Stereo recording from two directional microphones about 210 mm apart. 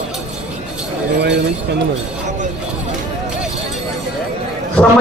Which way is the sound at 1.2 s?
55° right (ahead or behind).